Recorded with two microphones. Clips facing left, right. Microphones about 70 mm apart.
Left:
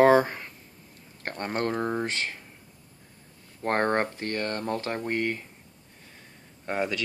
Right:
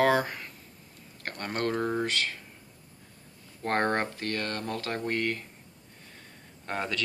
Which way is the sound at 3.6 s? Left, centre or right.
Left.